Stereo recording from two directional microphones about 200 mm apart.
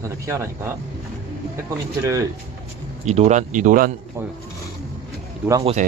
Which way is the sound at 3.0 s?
35° right (ahead or behind).